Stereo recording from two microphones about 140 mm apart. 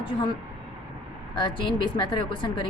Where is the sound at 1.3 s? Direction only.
35° left (ahead or behind).